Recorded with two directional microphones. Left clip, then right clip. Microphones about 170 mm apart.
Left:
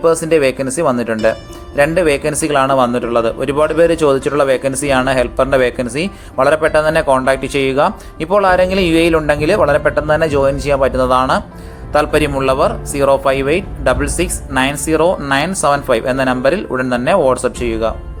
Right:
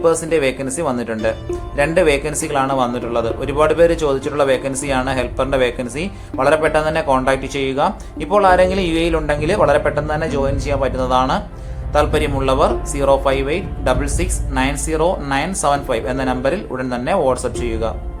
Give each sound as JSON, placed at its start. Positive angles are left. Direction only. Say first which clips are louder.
{"t": 0.0, "sound": "speech", "louder": "left 4 dB", "side_deg": 25}